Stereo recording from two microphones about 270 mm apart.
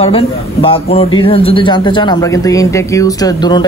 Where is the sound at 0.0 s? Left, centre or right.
Left.